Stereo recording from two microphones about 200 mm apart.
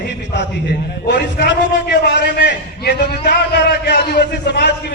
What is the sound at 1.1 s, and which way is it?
A man's voice, 55° left (ahead or behind).